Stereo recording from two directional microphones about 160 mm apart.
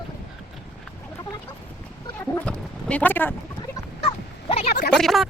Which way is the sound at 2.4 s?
10° left (ahead or behind).